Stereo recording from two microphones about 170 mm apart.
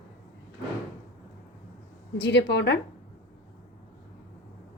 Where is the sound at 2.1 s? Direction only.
90° left.